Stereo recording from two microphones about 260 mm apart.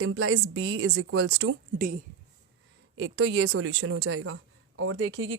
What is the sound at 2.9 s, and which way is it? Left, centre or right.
Speech, right.